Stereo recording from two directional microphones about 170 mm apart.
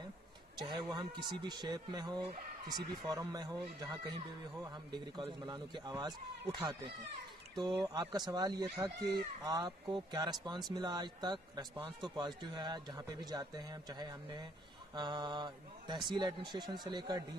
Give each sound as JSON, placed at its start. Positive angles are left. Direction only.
{"t": 0.6, "sound": "a man's voice", "side_deg": -25}